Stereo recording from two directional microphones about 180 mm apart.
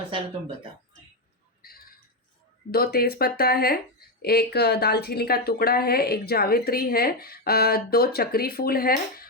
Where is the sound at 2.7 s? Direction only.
60° left (ahead or behind).